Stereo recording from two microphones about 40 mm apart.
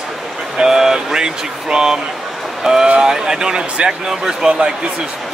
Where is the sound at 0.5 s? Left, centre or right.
Centre.